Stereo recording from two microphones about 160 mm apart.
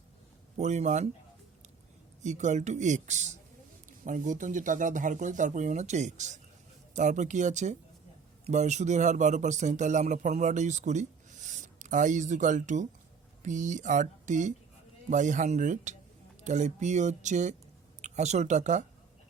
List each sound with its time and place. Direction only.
0.5 s speech: 45° right (ahead or behind)
2.2 s speech: 50° right (ahead or behind)